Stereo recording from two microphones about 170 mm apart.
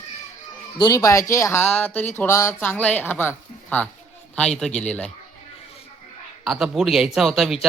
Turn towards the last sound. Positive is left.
turn(degrees=0)  # may be behind; listen again after turning